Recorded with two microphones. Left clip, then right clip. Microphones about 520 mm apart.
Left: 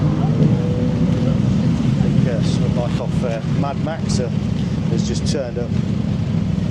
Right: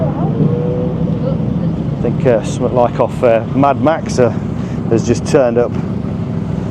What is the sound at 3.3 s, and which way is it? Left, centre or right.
Speech, right.